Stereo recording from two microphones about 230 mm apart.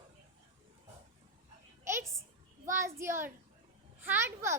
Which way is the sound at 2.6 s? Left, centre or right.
Centre.